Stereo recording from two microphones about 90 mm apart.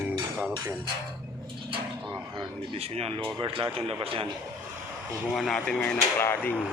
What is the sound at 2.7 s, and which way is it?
Speech, 90° right.